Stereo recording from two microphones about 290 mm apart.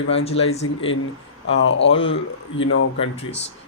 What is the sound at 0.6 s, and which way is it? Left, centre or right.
Speech, left.